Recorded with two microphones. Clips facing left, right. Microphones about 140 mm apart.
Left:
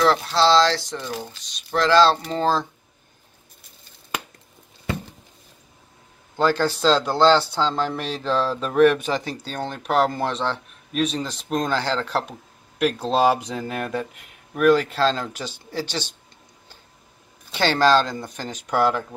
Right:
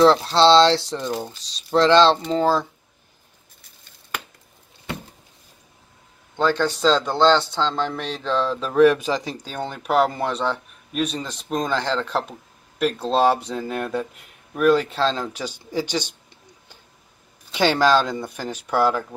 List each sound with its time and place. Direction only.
0.0 s speech: 30° right (ahead or behind)
0.9 s speech: 20° right (ahead or behind)
1.4 s speech: 30° right (ahead or behind)
2.3 s speech: 10° right (ahead or behind)
6.3 s a man's voice: 5° left (ahead or behind)
15.4 s speech: 15° right (ahead or behind)
17.6 s speech: 10° right (ahead or behind)